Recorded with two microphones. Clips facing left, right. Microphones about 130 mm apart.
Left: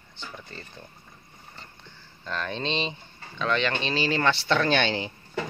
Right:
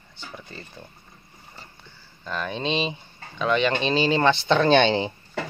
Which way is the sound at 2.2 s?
10° right (ahead or behind).